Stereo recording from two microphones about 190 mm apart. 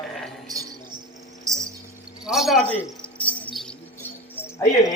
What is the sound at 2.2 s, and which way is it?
Cricket, centre (ahead or behind).